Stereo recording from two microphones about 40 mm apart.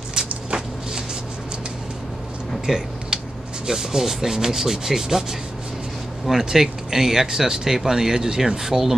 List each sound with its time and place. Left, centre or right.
2.6 s a sound: centre
3.6 s speech: centre
6.2 s speech: centre